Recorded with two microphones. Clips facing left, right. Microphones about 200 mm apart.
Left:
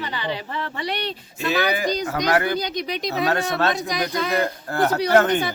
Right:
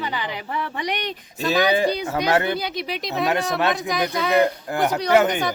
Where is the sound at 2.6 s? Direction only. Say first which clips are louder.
Left 2 dB; 5° right (ahead or behind).